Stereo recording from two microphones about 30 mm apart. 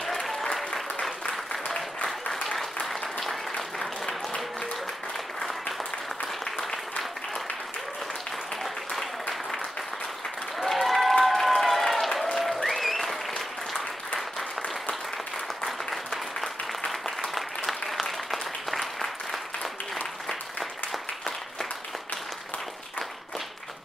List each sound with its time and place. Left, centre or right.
0.0 s applause: centre
2.4 s applause: centre
10.6 s applause: centre
16.1 s applause: centre
17.3 s applause: centre